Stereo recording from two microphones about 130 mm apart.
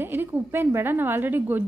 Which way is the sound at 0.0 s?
15° right (ahead or behind).